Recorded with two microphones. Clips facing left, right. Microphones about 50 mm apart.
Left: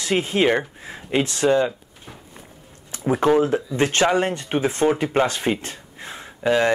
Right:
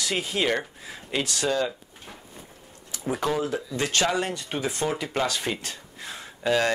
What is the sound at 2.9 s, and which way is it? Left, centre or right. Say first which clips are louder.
Speech: left 8 dB; left.